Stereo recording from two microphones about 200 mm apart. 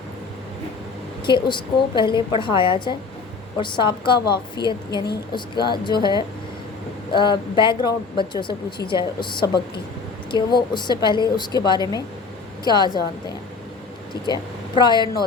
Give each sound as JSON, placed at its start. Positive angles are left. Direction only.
{"t": 1.2, "sound": "a woman's voice", "side_deg": 25}
{"t": 14.8, "sound": "a woman's voice", "side_deg": 20}